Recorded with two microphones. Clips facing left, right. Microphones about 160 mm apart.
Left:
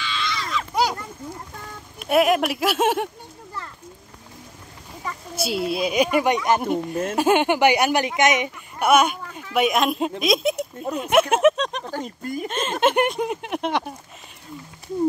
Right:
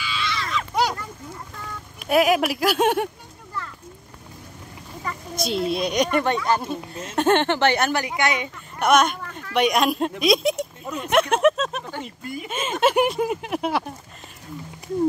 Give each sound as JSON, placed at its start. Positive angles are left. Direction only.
{"t": 0.0, "sound": "a sound", "side_deg": -5}
{"t": 2.0, "sound": "speech", "side_deg": 0}
{"t": 5.0, "sound": "speech", "side_deg": 5}
{"t": 8.7, "sound": "speech", "side_deg": 5}
{"t": 11.9, "sound": "speech", "side_deg": 40}
{"t": 12.4, "sound": "speech", "side_deg": -5}